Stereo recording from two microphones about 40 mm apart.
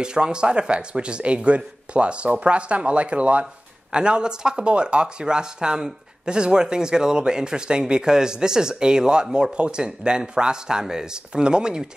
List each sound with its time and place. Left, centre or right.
0.0 s speech: right